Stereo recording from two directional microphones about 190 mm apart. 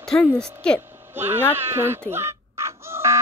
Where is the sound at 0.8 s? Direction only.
10° right (ahead or behind).